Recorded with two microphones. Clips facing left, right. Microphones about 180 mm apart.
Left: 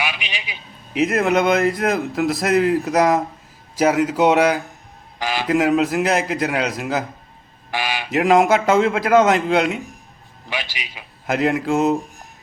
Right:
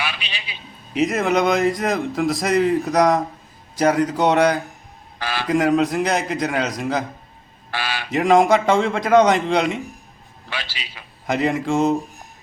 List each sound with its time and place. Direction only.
0.0 s a sound: 15° left (ahead or behind)
0.9 s a man's voice: centre (ahead or behind)
5.5 s a man's voice: 5° left (ahead or behind)
7.7 s speech: 15° left (ahead or behind)
8.1 s a man's voice: 5° left (ahead or behind)
10.5 s speech: 15° left (ahead or behind)
11.3 s a man's voice: centre (ahead or behind)